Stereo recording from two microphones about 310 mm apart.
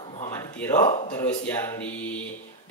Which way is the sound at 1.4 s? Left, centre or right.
Centre.